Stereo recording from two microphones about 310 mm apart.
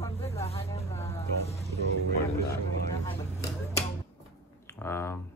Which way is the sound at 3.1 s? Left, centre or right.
Centre.